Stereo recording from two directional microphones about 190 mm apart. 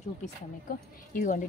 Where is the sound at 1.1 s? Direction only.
45° left (ahead or behind).